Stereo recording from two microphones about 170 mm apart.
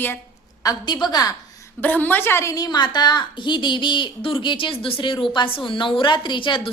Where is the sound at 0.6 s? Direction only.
25° left (ahead or behind).